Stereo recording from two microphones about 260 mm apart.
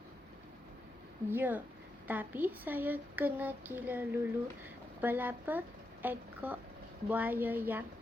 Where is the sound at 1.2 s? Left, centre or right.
Centre.